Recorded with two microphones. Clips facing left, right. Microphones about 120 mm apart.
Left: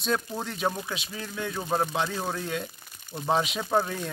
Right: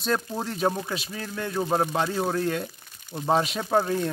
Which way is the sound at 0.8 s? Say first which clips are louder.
Right 3 dB; centre (ahead or behind).